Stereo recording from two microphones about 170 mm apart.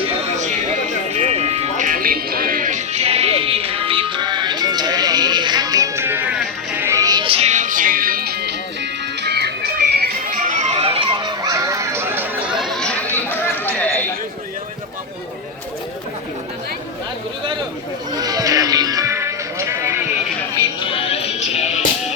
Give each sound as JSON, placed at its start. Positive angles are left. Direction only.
{"t": 1.1, "sound": "music", "side_deg": -40}
{"t": 13.1, "sound": "chatter", "side_deg": 10}
{"t": 18.1, "sound": "music", "side_deg": -20}
{"t": 20.9, "sound": "music", "side_deg": 35}